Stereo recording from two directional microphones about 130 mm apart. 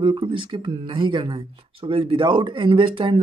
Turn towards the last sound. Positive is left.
turn(degrees=-40)  # may be behind; listen again after turning